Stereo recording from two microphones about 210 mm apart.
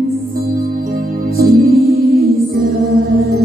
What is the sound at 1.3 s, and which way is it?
Music, 45° right (ahead or behind).